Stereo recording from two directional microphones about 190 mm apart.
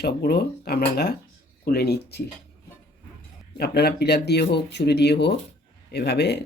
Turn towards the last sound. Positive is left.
turn(degrees=60)  # may be behind; listen again after turning